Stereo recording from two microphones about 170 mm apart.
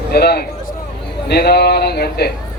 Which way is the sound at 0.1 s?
70° left (ahead or behind).